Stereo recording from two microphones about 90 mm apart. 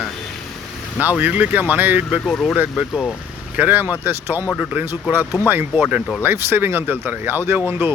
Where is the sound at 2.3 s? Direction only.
5° left (ahead or behind).